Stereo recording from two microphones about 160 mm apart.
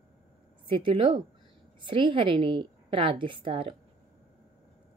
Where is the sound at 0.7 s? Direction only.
30° right (ahead or behind).